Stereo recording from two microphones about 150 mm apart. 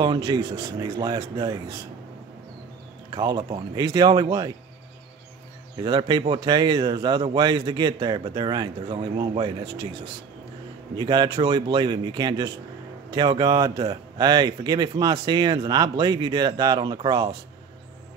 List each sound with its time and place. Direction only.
0.0 s speech: 30° right (ahead or behind)
3.2 s speech: 25° right (ahead or behind)
5.9 s speech: 30° right (ahead or behind)
11.0 s speech: 30° right (ahead or behind)